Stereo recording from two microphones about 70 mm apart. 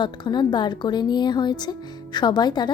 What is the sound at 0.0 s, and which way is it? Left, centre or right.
A woman's voice, left.